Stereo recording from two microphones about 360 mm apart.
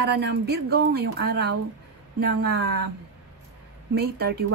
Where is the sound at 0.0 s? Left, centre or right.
Right.